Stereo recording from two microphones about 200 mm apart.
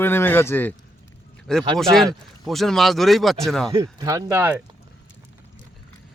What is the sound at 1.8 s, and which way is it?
Speech, centre (ahead or behind).